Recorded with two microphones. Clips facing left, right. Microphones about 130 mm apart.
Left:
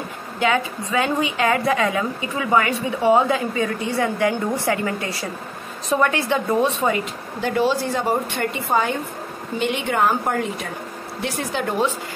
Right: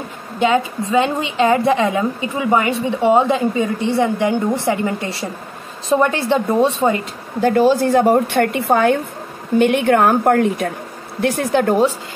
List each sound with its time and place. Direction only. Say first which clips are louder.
0.4 s a woman's voice: right 5 dB; 25° right (ahead or behind)
7.4 s a woman's voice: right 7 dB; 45° right (ahead or behind)